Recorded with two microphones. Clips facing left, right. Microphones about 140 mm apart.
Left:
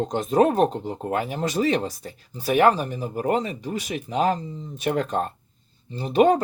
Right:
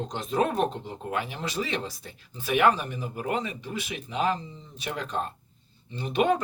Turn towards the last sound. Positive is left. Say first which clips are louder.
# left 6 dB
turn(degrees=40)  # may be behind; listen again after turning